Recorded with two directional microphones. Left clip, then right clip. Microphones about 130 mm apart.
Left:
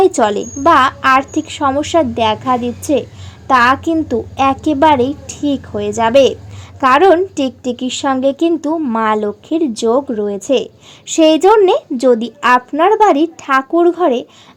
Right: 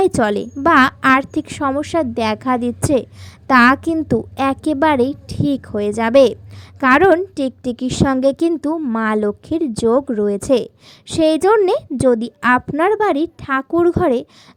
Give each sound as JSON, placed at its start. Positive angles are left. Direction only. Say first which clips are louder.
{"t": 0.0, "sound": "a woman's voice", "louder": "left 4 dB", "side_deg": -50}
{"t": 8.8, "sound": "a woman's voice", "louder": "left 4 dB", "side_deg": -45}
{"t": 11.0, "sound": "a woman's voice", "louder": "left 5 dB", "side_deg": -40}
{"t": 13.7, "sound": "speech", "louder": "left 1 dB", "side_deg": -55}